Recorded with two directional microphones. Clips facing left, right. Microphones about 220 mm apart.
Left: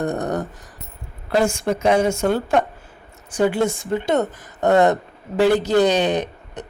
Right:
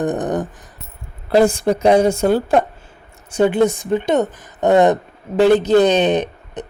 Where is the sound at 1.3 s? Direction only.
35° right (ahead or behind).